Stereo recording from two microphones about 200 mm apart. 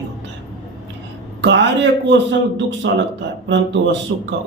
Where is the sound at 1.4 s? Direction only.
65° right (ahead or behind).